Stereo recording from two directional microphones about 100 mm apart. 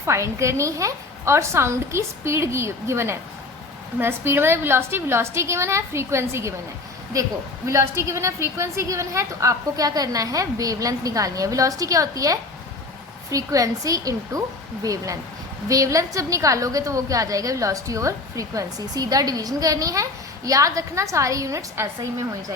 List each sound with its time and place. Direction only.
0.0 s a woman's voice: 30° right (ahead or behind)